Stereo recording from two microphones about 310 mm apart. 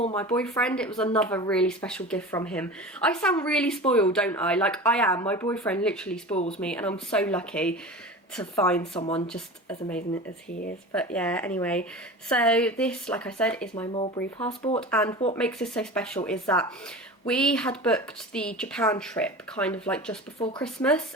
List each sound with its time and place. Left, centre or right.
0.2 s speech: centre
6.3 s speech: left
6.6 s speech: centre
9.0 s speech: centre
9.2 s speech: centre